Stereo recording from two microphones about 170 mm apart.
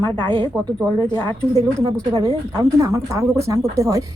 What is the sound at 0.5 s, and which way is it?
Speech, 10° left (ahead or behind).